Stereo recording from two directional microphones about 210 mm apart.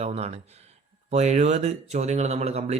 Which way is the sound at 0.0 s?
30° right (ahead or behind).